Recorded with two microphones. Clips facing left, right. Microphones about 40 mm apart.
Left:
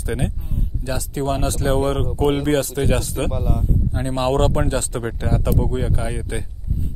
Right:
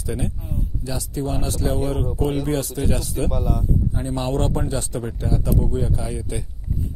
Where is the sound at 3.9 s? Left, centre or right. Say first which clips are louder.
Left 9 dB; left.